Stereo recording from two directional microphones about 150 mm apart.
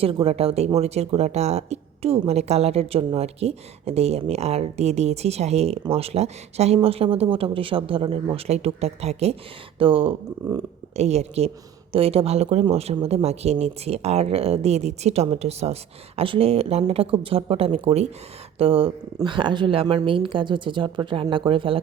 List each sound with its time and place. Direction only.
0.0 s a man's voice: 35° right (ahead or behind)
10.4 s speech: 25° right (ahead or behind)
10.9 s a man's voice: 45° right (ahead or behind)